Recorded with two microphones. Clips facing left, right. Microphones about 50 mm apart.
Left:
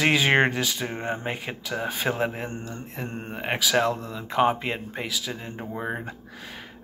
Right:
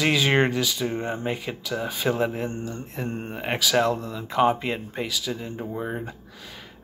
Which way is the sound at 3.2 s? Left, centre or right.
Centre.